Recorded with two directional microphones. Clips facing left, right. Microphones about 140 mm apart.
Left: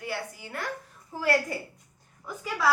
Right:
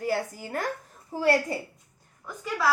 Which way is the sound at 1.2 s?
30° right (ahead or behind).